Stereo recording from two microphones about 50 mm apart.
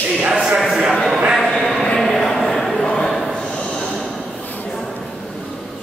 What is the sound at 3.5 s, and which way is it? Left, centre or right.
Snort, centre.